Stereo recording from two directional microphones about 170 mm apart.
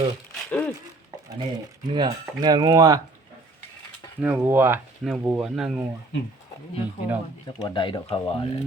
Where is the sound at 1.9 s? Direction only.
25° right (ahead or behind).